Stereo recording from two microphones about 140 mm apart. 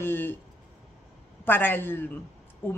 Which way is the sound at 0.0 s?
15° left (ahead or behind).